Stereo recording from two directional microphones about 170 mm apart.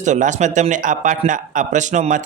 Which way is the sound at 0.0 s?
45° right (ahead or behind).